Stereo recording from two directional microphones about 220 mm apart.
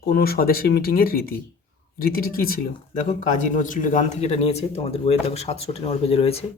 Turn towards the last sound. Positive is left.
turn(degrees=25)  # may be behind; listen again after turning